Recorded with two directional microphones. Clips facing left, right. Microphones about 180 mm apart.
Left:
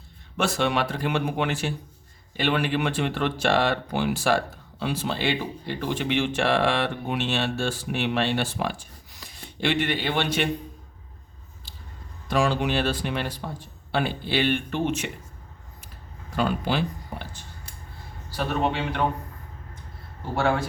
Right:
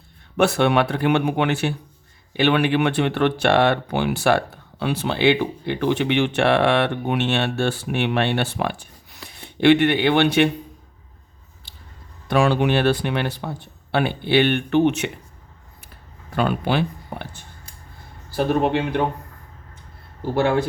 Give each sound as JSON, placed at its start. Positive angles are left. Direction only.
{"t": 0.3, "sound": "speech", "side_deg": -60}
{"t": 12.3, "sound": "speech", "side_deg": -60}
{"t": 16.3, "sound": "speech", "side_deg": -60}
{"t": 18.3, "sound": "a man's voice", "side_deg": -55}